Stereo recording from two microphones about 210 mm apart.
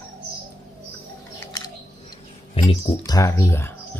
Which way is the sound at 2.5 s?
25° left (ahead or behind).